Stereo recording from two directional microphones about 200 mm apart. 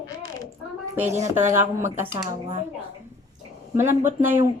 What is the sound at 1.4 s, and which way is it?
Speech, 40° right (ahead or behind).